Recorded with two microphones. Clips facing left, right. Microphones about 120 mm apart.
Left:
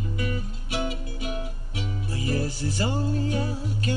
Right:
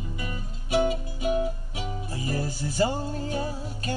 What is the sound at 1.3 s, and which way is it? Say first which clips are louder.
Music: right 7 dB; 35° right (ahead or behind).